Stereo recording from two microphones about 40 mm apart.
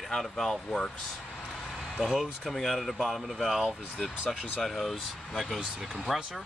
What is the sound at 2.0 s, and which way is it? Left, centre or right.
Speech, centre.